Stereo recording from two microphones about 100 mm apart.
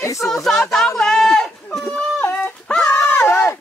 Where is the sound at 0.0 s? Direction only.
30° left (ahead or behind).